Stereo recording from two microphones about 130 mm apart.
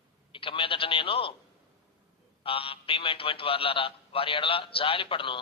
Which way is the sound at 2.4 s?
45° left (ahead or behind).